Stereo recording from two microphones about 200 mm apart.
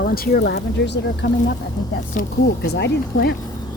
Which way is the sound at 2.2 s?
40° left (ahead or behind).